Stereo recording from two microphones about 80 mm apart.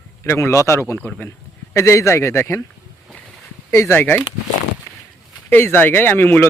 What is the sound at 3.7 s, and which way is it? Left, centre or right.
Speech, left.